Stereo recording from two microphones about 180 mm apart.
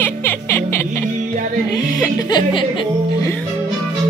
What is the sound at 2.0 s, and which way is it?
Speech, 25° left (ahead or behind).